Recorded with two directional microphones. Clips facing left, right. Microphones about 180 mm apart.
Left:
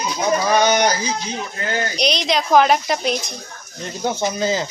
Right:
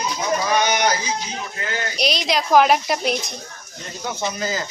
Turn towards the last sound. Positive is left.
turn(degrees=25)  # may be behind; listen again after turning